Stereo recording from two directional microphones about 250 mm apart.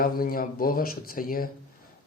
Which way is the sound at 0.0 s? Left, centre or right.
Left.